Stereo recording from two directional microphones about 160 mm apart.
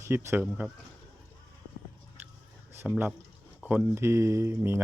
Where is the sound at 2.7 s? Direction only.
10° right (ahead or behind).